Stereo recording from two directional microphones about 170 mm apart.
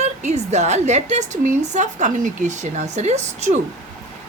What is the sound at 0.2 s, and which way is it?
A woman's voice, 40° right (ahead or behind).